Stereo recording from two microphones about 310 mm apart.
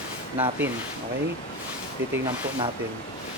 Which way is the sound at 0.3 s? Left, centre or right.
Centre.